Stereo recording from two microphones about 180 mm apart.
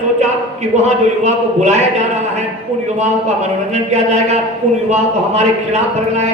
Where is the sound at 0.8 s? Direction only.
40° right (ahead or behind).